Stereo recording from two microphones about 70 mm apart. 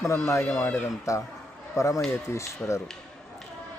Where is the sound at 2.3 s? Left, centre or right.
Left.